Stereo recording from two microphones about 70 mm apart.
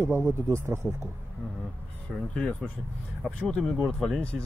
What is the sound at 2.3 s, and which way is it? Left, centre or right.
Speech, centre.